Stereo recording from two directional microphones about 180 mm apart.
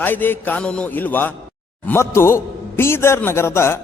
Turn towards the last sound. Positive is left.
turn(degrees=15)  # may be behind; listen again after turning